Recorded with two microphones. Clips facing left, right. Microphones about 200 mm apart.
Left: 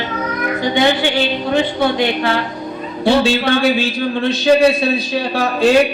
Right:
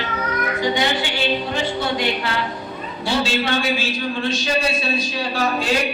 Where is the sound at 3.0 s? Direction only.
60° left (ahead or behind).